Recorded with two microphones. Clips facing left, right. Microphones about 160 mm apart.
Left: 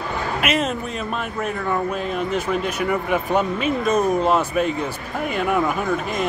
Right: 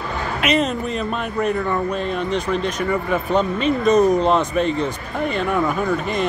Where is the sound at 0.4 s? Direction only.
Centre (ahead or behind).